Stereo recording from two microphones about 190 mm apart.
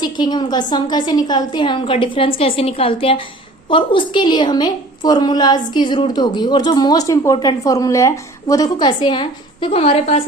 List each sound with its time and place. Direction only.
0.0 s a woman's voice: 20° left (ahead or behind)